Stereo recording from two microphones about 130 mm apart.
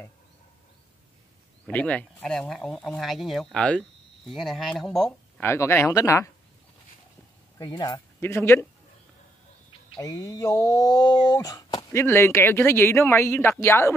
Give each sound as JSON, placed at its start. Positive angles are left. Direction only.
{"t": 1.7, "sound": "speech", "side_deg": 10}
{"t": 5.4, "sound": "speech", "side_deg": 20}
{"t": 7.5, "sound": "speech", "side_deg": 30}
{"t": 8.2, "sound": "speech", "side_deg": 20}
{"t": 9.9, "sound": "speech", "side_deg": 25}